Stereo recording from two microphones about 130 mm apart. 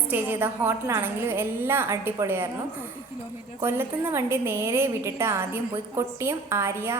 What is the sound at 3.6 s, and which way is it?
A woman's voice, 20° right (ahead or behind).